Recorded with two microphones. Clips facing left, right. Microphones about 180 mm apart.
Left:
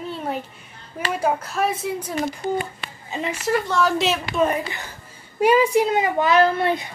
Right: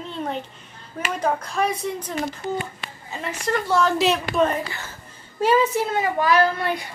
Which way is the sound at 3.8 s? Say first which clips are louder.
Right 1 dB; centre (ahead or behind).